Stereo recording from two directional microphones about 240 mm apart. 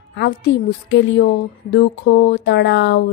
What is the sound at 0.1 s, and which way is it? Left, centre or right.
A woman's voice, left.